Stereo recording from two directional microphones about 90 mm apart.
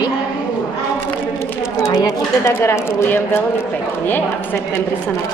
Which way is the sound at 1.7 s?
35° left (ahead or behind).